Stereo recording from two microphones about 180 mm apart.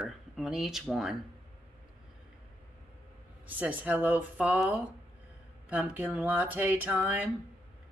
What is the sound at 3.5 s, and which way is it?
Speech, 10° right (ahead or behind).